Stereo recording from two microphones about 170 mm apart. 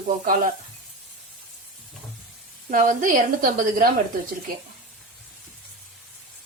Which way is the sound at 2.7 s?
50° right (ahead or behind).